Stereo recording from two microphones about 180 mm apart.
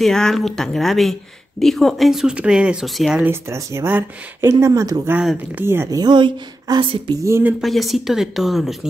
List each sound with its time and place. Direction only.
0.0 s speech: centre (ahead or behind)
3.3 s speech: 15° right (ahead or behind)
5.1 s a woman's voice: 5° right (ahead or behind); by 7.2 s 25° right (ahead or behind)
7.2 s speech: 15° right (ahead or behind)
7.6 s speech: centre (ahead or behind)